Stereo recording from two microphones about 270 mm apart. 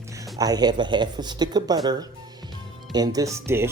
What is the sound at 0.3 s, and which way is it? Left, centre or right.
Speech, centre.